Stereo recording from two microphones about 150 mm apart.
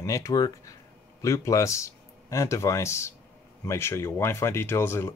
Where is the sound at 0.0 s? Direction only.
20° left (ahead or behind).